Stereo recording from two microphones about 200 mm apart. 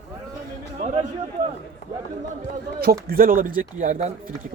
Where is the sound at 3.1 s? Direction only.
45° right (ahead or behind).